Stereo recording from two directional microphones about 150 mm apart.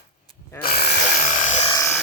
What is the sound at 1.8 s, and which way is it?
Music, 15° left (ahead or behind).